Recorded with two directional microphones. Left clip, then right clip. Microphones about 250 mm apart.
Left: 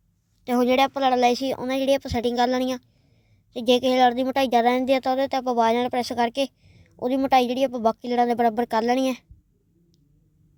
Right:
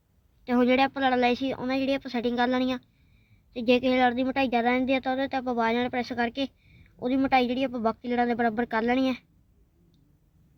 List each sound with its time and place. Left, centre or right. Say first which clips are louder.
0.4 s a woman's voice: left 3 dB; left